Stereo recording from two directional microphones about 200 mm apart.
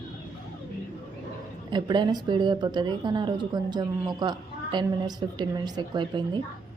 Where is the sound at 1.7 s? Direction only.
20° right (ahead or behind).